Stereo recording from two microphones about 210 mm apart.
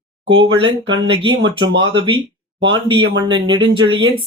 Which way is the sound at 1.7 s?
65° right (ahead or behind).